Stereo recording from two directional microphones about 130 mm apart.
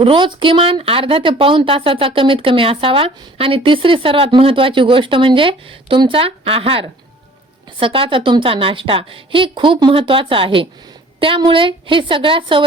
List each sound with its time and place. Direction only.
0.0 s a woman's voice: 40° right (ahead or behind)